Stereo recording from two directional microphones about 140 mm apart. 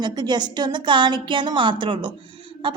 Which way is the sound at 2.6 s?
35° right (ahead or behind).